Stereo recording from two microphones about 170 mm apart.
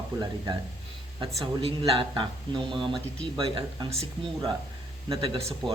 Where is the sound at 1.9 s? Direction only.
30° right (ahead or behind).